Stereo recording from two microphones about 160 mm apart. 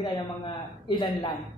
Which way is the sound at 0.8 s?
30° left (ahead or behind).